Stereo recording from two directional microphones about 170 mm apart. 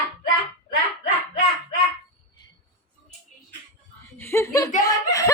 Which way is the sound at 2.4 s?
25° left (ahead or behind).